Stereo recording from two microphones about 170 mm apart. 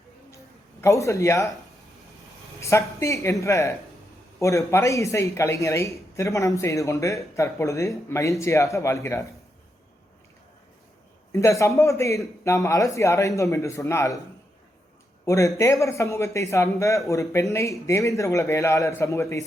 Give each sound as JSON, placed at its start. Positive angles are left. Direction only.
{"t": 0.8, "sound": "a man's voice", "side_deg": 20}
{"t": 2.6, "sound": "a woman's voice", "side_deg": 15}
{"t": 11.3, "sound": "a man's voice", "side_deg": 15}
{"t": 15.2, "sound": "a man's voice", "side_deg": 20}